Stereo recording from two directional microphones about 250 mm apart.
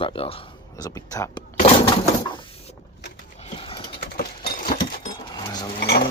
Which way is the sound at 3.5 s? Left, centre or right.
Left.